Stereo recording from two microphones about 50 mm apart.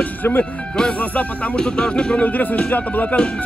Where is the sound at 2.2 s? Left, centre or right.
Left.